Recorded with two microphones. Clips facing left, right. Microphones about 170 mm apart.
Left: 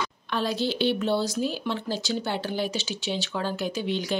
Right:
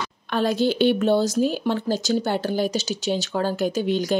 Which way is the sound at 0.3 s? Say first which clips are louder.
Right 6 dB; 50° right (ahead or behind).